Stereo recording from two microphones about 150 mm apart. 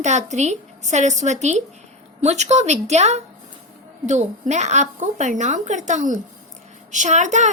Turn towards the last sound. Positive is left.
turn(degrees=-50)  # may be behind; listen again after turning